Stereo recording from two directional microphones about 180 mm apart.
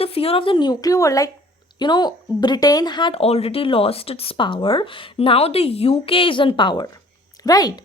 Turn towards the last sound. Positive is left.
turn(degrees=20)  # may be behind; listen again after turning